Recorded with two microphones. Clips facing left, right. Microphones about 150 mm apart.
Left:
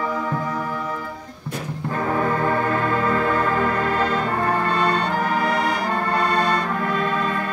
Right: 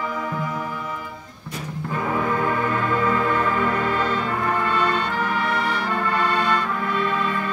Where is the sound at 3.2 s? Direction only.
40° left (ahead or behind).